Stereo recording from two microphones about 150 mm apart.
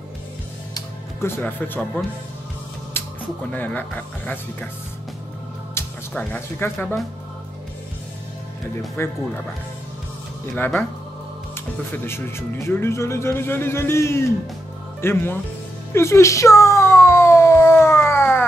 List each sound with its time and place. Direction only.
0.7 s music: 15° left (ahead or behind)
3.5 s speech: 10° left (ahead or behind)
5.8 s speech: 15° left (ahead or behind)
9.0 s speech: 15° left (ahead or behind)
10.4 s speech: 10° left (ahead or behind)
11.9 s speech: 15° left (ahead or behind)
15.9 s a sound: 15° left (ahead or behind)